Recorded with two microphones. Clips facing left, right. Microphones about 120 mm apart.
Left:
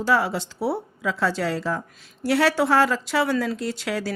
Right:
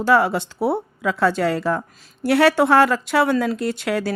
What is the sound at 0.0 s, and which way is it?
A woman's voice, 60° right (ahead or behind).